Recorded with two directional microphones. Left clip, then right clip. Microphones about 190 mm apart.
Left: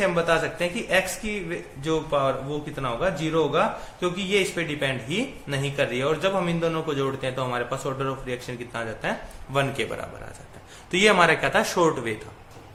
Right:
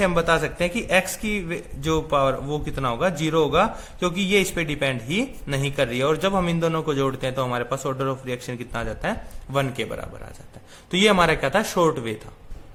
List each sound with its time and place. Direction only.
0.0 s speech: 40° right (ahead or behind)